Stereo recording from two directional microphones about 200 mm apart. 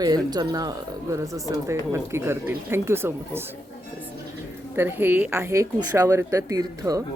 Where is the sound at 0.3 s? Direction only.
20° right (ahead or behind).